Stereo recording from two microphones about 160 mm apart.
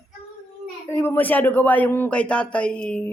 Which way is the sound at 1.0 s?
10° left (ahead or behind).